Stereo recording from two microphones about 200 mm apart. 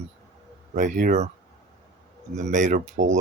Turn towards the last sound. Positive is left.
turn(degrees=-40)  # may be behind; listen again after turning